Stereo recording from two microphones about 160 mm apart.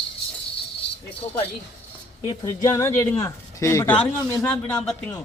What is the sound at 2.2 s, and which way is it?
A man's voice, 25° left (ahead or behind).